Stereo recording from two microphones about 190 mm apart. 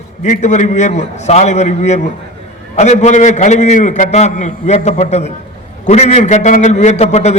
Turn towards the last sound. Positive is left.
turn(degrees=35)  # may be behind; listen again after turning